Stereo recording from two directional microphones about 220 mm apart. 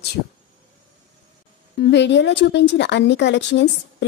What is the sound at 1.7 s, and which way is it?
A woman's voice, 50° left (ahead or behind).